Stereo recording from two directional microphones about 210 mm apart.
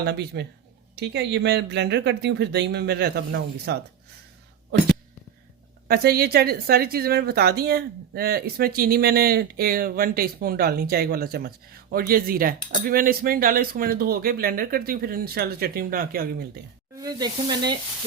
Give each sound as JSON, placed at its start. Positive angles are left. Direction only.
{"t": 0.0, "sound": "a woman's voice", "side_deg": -50}
{"t": 5.9, "sound": "a woman's voice", "side_deg": -50}
{"t": 17.0, "sound": "speech", "side_deg": -20}